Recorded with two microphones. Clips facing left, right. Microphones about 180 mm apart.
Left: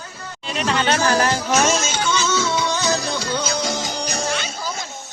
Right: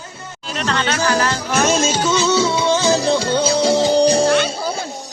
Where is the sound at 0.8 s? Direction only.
15° left (ahead or behind).